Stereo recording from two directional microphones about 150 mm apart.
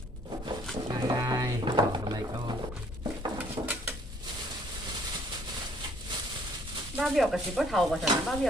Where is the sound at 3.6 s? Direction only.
25° right (ahead or behind).